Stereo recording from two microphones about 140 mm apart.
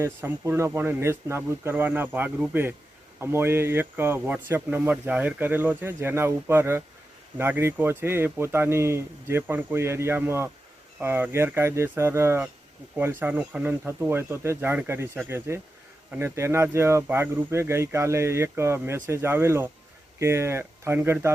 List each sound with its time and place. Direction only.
0.0 s speech: 20° right (ahead or behind)